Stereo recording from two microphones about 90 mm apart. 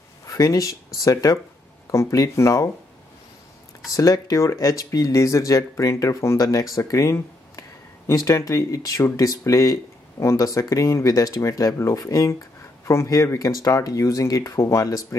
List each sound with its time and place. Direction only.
0.3 s speech: 40° left (ahead or behind)
3.9 s speech: 40° left (ahead or behind)